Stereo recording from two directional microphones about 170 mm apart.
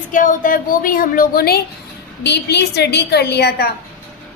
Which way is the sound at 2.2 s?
80° left.